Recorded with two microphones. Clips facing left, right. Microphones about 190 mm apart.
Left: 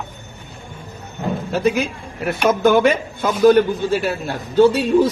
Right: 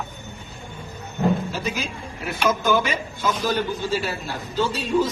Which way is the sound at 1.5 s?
60° left (ahead or behind).